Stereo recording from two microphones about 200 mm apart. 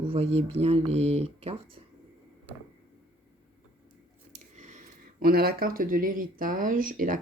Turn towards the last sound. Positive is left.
turn(degrees=-45)  # may be behind; listen again after turning